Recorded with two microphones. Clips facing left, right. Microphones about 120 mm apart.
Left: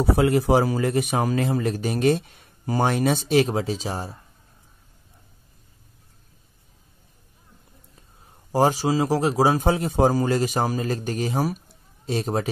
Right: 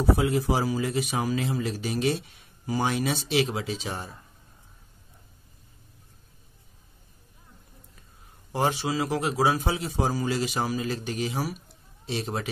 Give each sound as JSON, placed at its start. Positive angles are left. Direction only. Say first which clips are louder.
{"t": 0.0, "sound": "a man's voice", "louder": "left 4 dB", "side_deg": 65}
{"t": 8.5, "sound": "a man's voice", "louder": "left 6 dB", "side_deg": 40}